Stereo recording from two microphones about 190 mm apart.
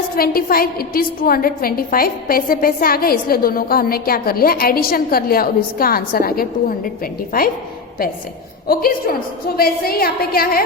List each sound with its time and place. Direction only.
0.2 s a woman's voice: 50° left (ahead or behind)
8.6 s a woman's voice: 50° left (ahead or behind)